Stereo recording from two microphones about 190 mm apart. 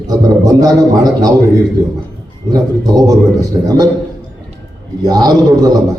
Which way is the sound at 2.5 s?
20° right (ahead or behind).